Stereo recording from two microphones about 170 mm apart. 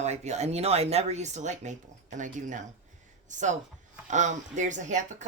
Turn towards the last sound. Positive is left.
turn(degrees=-45)  # may be behind; listen again after turning